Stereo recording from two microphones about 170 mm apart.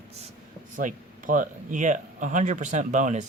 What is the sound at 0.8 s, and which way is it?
Speech, 50° right (ahead or behind).